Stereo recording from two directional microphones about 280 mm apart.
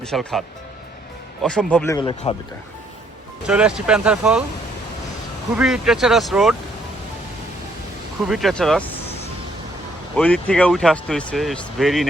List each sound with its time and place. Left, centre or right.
0.0 s speech: centre
2.0 s speech: centre
3.4 s speech: centre
5.5 s speech: centre
8.3 s speech: centre
10.2 s speech: centre